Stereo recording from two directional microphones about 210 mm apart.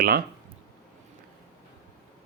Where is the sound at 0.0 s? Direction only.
45° right (ahead or behind).